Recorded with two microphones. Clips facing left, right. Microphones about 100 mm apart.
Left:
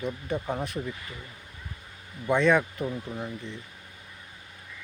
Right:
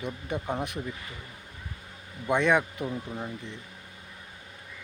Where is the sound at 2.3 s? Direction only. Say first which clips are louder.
Left 2 dB; 15° right (ahead or behind).